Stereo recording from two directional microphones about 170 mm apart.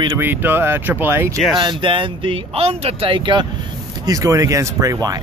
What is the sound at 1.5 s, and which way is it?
A man's voice, 30° right (ahead or behind).